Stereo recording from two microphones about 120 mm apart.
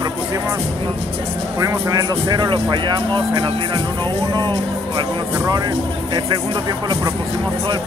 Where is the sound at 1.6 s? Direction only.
30° right (ahead or behind).